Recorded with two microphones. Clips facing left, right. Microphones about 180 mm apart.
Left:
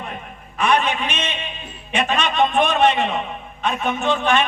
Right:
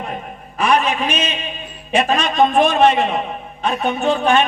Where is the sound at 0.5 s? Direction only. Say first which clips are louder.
Right 2 dB; 35° right (ahead or behind).